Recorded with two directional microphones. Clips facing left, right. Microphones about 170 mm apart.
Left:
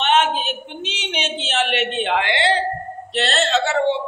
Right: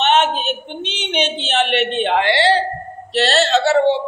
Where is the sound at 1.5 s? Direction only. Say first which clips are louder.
Right 2 dB; 30° right (ahead or behind).